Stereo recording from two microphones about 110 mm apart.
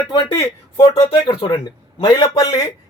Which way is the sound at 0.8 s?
65° left (ahead or behind).